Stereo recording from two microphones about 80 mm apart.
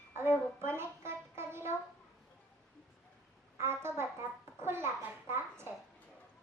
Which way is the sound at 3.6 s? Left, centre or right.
Right.